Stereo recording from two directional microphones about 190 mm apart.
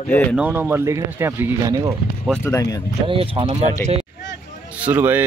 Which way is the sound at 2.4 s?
20° left (ahead or behind).